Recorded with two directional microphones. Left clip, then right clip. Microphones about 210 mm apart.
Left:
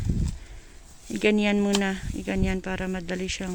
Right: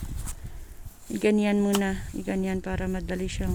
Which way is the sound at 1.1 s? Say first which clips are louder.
Left 1 dB; 5° right (ahead or behind).